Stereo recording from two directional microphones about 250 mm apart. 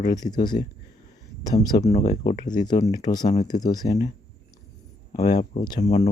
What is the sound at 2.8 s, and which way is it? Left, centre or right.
Speech, centre.